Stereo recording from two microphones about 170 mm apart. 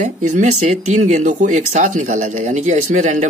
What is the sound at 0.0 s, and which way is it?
Speech, 45° right (ahead or behind).